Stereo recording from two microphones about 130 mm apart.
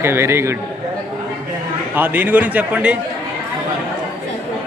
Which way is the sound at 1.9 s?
15° right (ahead or behind).